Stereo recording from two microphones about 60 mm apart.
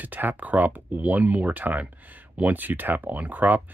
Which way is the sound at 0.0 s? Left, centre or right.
Right.